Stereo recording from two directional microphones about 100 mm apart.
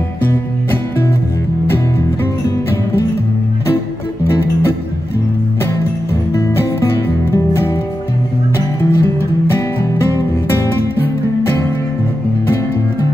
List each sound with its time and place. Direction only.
0.2 s music: 25° left (ahead or behind)
6.3 s music: 25° left (ahead or behind)